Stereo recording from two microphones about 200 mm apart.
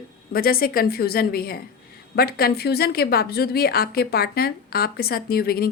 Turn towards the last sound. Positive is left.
turn(degrees=50)  # may be behind; listen again after turning